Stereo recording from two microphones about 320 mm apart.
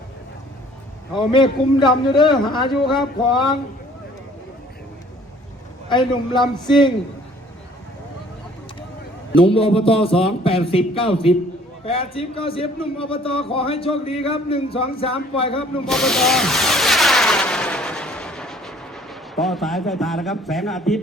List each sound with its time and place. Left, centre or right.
1.1 s a man's voice: centre
5.9 s a man's voice: centre
9.5 s a man's voice: centre
15.9 s a sound: centre
19.4 s a man's voice: centre